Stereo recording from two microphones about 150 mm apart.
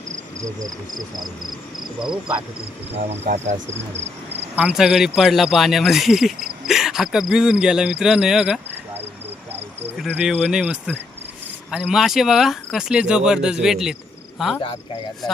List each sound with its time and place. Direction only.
0.9 s speech: 25° right (ahead or behind)
3.2 s speech: 50° right (ahead or behind)
4.5 s speech: 5° right (ahead or behind)
10.2 s cricket: 5° right (ahead or behind)
11.7 s speech: 5° right (ahead or behind)